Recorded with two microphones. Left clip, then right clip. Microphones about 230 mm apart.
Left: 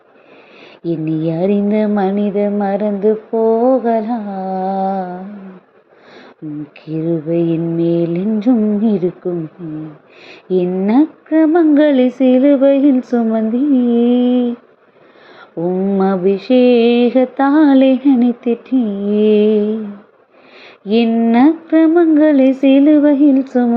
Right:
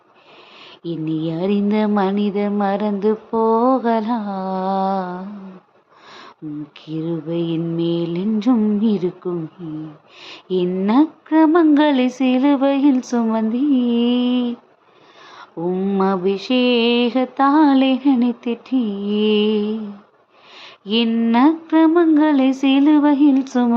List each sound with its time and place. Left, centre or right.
0.9 s mantra: centre
3.3 s a sound: right
3.6 s speech: centre
4.6 s a sound: centre
6.8 s mantra: centre
10.2 s mantra: centre